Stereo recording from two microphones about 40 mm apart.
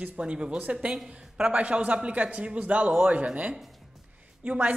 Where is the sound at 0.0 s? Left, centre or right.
Right.